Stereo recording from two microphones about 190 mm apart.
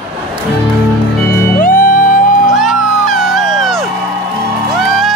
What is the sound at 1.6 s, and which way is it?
Music, 45° left (ahead or behind).